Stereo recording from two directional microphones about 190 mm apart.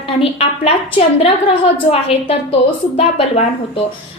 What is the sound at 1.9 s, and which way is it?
Speech, 30° left (ahead or behind).